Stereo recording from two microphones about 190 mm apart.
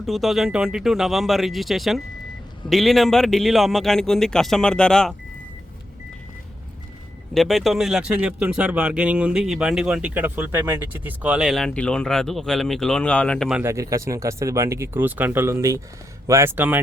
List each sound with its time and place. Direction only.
0.0 s speech: centre (ahead or behind)
7.3 s speech: centre (ahead or behind)
13.6 s speech: 15° right (ahead or behind)